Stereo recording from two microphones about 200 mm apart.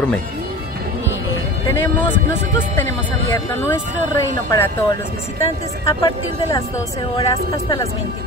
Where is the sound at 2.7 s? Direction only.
10° left (ahead or behind).